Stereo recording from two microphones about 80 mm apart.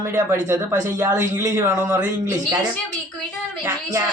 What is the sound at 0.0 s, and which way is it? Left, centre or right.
Speech, right.